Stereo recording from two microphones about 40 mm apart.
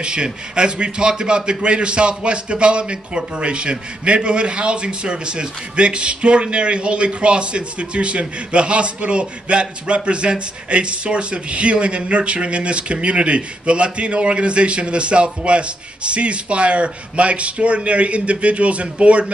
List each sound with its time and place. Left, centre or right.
0.0 s a man's voice: right